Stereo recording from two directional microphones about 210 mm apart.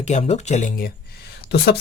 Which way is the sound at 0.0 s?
30° left (ahead or behind).